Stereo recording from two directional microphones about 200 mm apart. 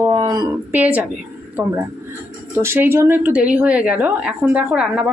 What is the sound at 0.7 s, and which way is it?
A woman's voice, 10° right (ahead or behind).